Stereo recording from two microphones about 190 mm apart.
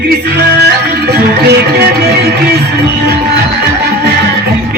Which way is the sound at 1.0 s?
60° right (ahead or behind).